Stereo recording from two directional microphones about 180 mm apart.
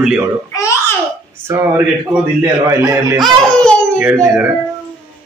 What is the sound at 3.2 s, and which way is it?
Speech, 5° left (ahead or behind).